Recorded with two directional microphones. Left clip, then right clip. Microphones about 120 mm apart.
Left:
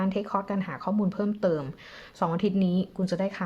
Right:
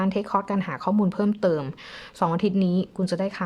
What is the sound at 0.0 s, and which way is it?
A woman's voice, 30° right (ahead or behind).